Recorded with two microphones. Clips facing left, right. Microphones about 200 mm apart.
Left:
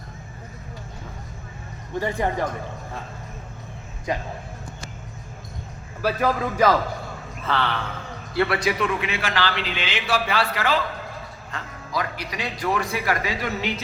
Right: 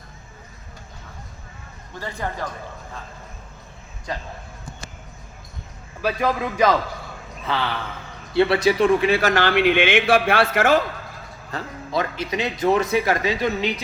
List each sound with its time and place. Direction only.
2.0 s speech: 20° left (ahead or behind)
4.1 s a man's voice: 15° left (ahead or behind)
6.0 s a man's voice: 10° left (ahead or behind)
8.3 s a man's voice: 25° right (ahead or behind); by 10.8 s 50° right (ahead or behind)
11.5 s a man's voice: 25° right (ahead or behind)